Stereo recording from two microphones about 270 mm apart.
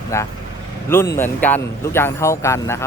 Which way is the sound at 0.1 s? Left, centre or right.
Centre.